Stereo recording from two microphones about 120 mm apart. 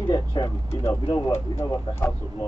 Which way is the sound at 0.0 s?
35° left (ahead or behind).